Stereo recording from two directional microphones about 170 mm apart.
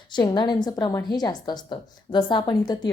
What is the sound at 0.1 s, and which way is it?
A woman's voice, 25° left (ahead or behind).